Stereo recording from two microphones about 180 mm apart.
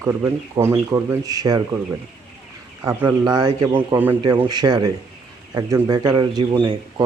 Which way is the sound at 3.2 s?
25° right (ahead or behind).